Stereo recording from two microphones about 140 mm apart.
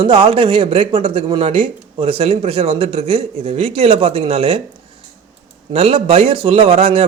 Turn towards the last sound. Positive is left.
turn(degrees=-45)  # may be behind; listen again after turning